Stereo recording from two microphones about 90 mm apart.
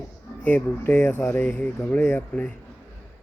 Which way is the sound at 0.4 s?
20° left (ahead or behind).